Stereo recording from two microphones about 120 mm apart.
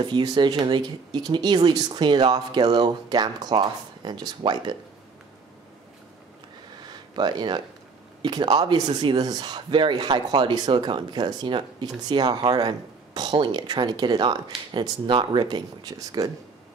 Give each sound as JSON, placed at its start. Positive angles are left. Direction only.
{"t": 0.0, "sound": "speech", "side_deg": -40}
{"t": 6.8, "sound": "a sound", "side_deg": -35}
{"t": 8.2, "sound": "speech", "side_deg": -40}